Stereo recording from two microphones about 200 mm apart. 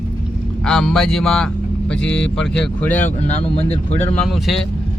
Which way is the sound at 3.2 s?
30° left (ahead or behind).